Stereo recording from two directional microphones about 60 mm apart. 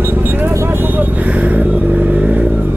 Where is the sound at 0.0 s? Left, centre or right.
Right.